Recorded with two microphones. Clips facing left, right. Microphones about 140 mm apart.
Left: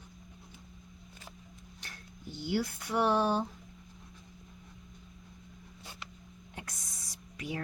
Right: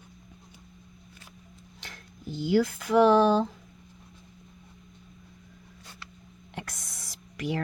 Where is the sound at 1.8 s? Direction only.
90° right.